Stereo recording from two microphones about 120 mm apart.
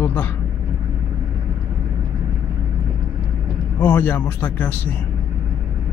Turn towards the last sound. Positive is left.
turn(degrees=15)  # may be behind; listen again after turning